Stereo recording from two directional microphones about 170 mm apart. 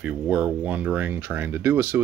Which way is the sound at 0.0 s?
5° right (ahead or behind).